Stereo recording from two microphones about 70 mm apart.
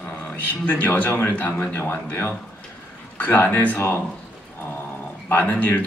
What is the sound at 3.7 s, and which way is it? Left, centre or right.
Speech, left.